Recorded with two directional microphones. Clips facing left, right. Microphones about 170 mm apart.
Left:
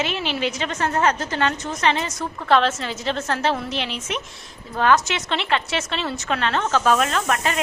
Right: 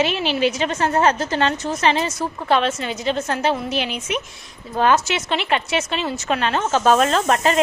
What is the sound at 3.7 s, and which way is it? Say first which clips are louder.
Speech: right 3 dB; 25° left (ahead or behind).